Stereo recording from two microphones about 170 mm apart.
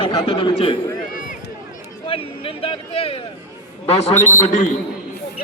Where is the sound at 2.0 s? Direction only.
35° left (ahead or behind).